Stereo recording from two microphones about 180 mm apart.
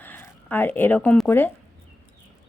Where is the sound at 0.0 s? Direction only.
10° left (ahead or behind).